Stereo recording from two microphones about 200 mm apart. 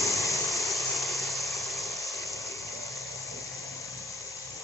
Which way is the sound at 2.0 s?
15° left (ahead or behind).